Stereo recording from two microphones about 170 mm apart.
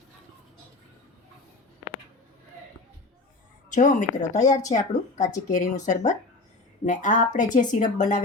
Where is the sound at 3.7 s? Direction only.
50° left (ahead or behind).